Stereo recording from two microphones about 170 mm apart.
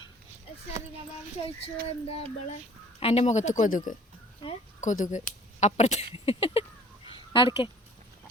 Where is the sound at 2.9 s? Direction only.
35° left (ahead or behind).